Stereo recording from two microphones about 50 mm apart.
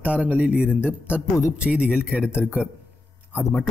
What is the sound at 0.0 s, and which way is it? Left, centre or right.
A man's voice, right.